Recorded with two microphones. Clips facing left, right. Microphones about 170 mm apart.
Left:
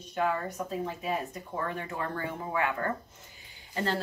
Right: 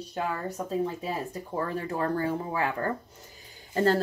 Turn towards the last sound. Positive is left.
turn(degrees=-40)  # may be behind; listen again after turning